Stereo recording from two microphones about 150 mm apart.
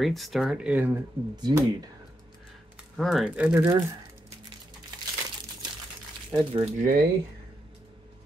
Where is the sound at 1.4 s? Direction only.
25° right (ahead or behind).